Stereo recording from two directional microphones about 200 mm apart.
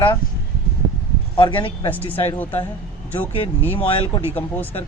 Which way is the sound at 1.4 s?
25° left (ahead or behind).